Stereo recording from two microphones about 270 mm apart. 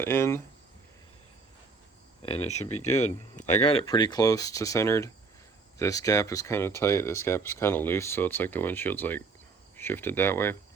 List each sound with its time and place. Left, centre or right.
0.0 s speech: centre
2.2 s speech: left